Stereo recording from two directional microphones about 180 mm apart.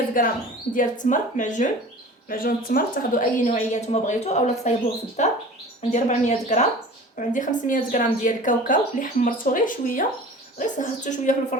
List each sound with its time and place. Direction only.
0.2 s a woman's voice: 50° left (ahead or behind)